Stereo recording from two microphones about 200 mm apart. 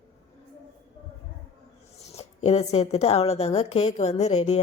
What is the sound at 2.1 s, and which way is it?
Speech, 30° left (ahead or behind).